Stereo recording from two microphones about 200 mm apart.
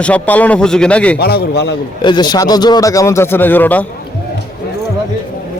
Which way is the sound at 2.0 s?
20° left (ahead or behind).